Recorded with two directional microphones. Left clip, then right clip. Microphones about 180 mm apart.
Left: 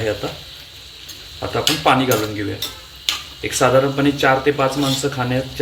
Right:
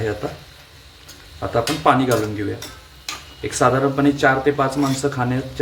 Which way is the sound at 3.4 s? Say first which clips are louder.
Left 2 dB; 35° right (ahead or behind).